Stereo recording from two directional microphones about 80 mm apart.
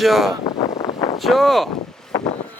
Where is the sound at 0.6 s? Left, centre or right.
Left.